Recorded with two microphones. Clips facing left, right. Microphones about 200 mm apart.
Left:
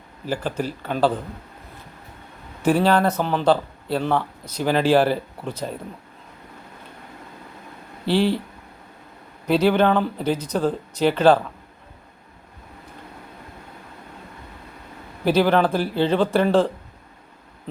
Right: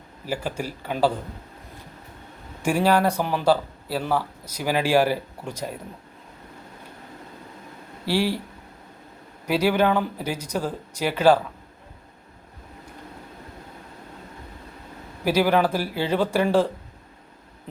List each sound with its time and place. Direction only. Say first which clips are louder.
0.3 s speech: left 3 dB; 10° right (ahead or behind)
2.6 s speech: left 2 dB; 10° right (ahead or behind)
8.0 s speech: left 4 dB; 10° right (ahead or behind)
9.5 s speech: left 3 dB; 10° right (ahead or behind)
15.2 s speech: left 2 dB; 10° right (ahead or behind)